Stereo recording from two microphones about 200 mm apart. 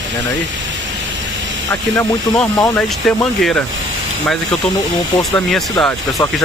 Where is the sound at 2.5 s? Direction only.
20° left (ahead or behind).